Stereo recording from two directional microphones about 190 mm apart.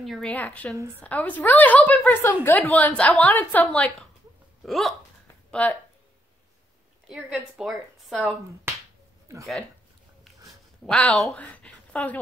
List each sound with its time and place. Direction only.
0.0 s a woman's voice: centre (ahead or behind)
7.1 s speech: centre (ahead or behind)
10.9 s a woman's voice: 5° left (ahead or behind)